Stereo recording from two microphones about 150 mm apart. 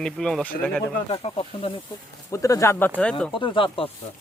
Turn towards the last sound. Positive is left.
turn(degrees=35)  # may be behind; listen again after turning